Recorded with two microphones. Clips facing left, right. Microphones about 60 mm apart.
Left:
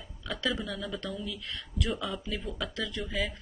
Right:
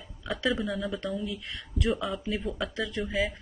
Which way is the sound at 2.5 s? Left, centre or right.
Centre.